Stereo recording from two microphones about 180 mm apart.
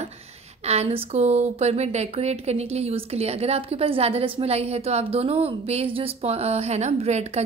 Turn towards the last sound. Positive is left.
turn(degrees=-35)  # may be behind; listen again after turning